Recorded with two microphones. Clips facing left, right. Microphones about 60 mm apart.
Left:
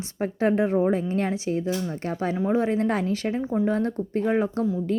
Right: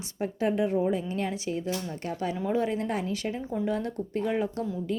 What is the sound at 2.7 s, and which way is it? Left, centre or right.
A woman's voice, left.